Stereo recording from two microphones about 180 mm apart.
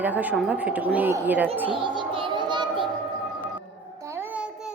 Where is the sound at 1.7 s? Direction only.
25° right (ahead or behind).